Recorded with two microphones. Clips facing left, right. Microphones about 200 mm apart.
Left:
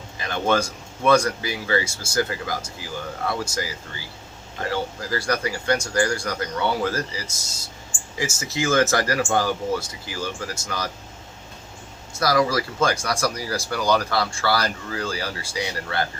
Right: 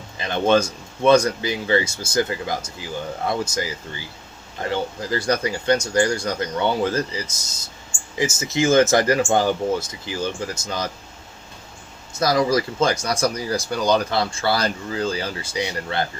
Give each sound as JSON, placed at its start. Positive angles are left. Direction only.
{"t": 0.2, "sound": "speech", "side_deg": -20}
{"t": 12.2, "sound": "speech", "side_deg": -20}